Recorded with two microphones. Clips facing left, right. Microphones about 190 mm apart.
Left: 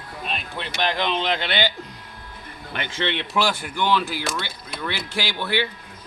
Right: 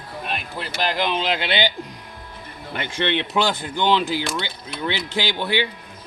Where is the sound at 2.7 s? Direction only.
20° right (ahead or behind).